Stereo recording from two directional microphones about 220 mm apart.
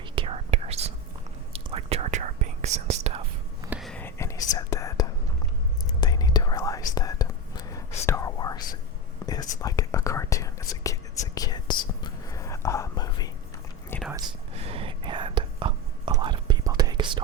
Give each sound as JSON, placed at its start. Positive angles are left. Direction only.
{"t": 0.0, "sound": "whispering", "side_deg": -25}
{"t": 3.6, "sound": "whispering", "side_deg": -5}
{"t": 14.5, "sound": "whispering", "side_deg": -25}